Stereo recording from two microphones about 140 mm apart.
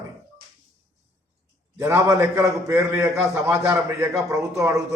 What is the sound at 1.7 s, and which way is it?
A man's voice, 15° right (ahead or behind).